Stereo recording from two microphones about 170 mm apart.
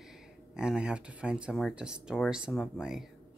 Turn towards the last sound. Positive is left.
turn(degrees=0)  # may be behind; listen again after turning